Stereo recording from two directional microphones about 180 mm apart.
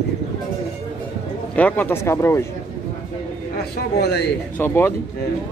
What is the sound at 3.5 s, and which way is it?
Speech, 65° left (ahead or behind).